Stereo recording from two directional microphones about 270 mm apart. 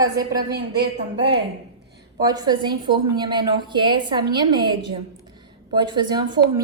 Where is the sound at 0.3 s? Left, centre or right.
Right.